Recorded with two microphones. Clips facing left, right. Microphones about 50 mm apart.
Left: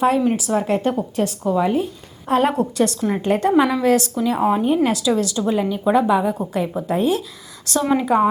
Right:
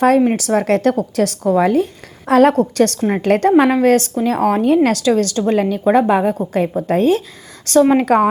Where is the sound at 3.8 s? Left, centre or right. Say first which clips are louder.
Right 4 dB; right.